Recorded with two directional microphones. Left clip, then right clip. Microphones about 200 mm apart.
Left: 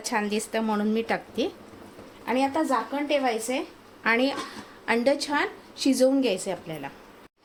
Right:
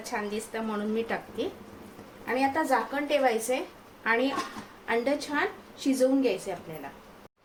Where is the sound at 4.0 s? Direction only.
45° left (ahead or behind).